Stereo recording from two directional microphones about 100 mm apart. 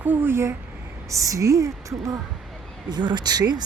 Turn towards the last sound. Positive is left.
turn(degrees=-45)  # may be behind; listen again after turning